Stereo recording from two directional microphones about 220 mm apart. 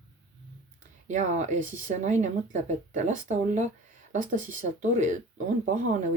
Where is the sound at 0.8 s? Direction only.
35° right (ahead or behind).